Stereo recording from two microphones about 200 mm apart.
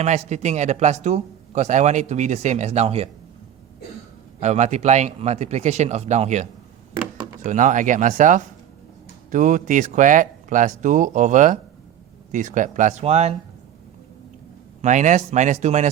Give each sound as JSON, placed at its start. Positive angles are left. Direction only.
{"t": 0.0, "sound": "speech", "side_deg": -35}
{"t": 4.4, "sound": "speech", "side_deg": -35}
{"t": 14.8, "sound": "speech", "side_deg": -35}